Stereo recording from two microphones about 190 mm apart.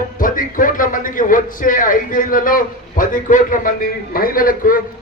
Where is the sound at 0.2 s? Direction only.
45° left (ahead or behind).